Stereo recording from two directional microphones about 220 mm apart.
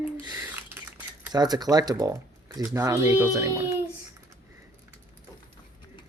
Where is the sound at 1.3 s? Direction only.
20° right (ahead or behind).